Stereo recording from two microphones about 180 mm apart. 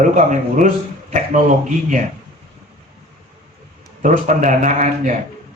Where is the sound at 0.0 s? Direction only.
45° right (ahead or behind).